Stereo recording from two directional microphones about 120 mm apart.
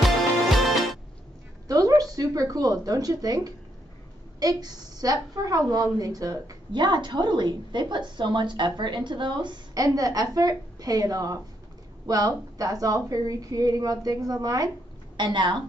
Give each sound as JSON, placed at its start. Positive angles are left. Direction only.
{"t": 0.0, "sound": "music", "side_deg": 0}
{"t": 1.7, "sound": "a woman's voice", "side_deg": -30}